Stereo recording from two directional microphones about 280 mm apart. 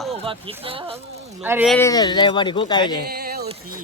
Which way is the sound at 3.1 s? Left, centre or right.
Right.